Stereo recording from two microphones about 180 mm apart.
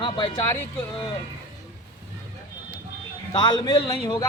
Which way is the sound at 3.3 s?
25° left (ahead or behind).